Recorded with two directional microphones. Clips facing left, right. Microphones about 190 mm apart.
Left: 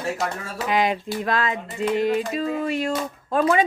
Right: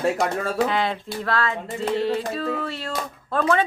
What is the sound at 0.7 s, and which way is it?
Speech, 15° left (ahead or behind).